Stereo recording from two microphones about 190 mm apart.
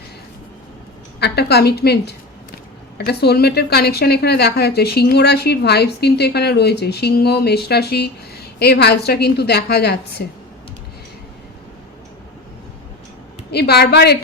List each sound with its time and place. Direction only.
1.2 s a woman's voice: 60° left (ahead or behind)
13.5 s a woman's voice: 60° left (ahead or behind)